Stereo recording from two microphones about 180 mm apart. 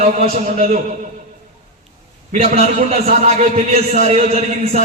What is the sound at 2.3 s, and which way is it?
A man's voice, 35° right (ahead or behind).